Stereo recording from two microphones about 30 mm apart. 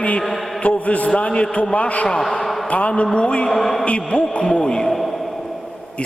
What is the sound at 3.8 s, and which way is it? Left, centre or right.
Speech, left.